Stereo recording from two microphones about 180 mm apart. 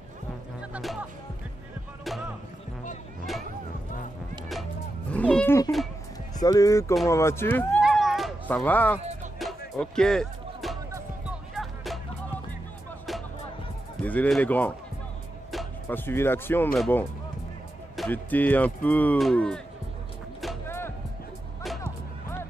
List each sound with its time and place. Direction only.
0.6 s music: 5° right (ahead or behind)
5.1 s music: 5° left (ahead or behind)
6.3 s speech: 20° left (ahead or behind)
7.8 s a sound: centre (ahead or behind)
8.5 s speech: 10° left (ahead or behind)
9.4 s music: centre (ahead or behind)
14.0 s speech: 10° left (ahead or behind)
15.9 s speech: 10° left (ahead or behind)
16.7 s speech: centre (ahead or behind)
20.6 s music: 15° left (ahead or behind)